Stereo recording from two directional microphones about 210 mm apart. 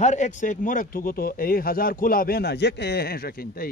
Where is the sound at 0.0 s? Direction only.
35° left (ahead or behind).